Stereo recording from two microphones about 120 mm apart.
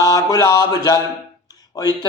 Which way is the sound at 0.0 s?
30° left (ahead or behind).